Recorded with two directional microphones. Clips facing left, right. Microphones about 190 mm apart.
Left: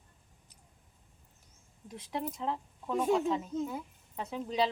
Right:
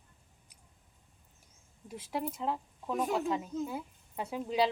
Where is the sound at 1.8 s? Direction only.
5° right (ahead or behind).